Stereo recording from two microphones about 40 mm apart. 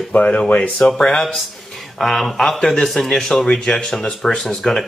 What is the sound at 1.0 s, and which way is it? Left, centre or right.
Speech, centre.